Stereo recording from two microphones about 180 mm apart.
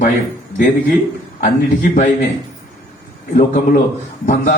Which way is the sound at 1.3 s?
50° left (ahead or behind).